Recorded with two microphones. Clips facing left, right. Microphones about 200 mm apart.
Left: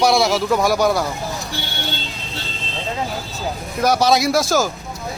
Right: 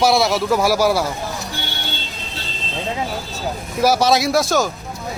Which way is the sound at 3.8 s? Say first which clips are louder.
Even; centre (ahead or behind).